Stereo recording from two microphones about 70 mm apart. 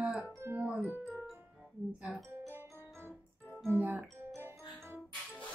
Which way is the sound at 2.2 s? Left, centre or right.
Right.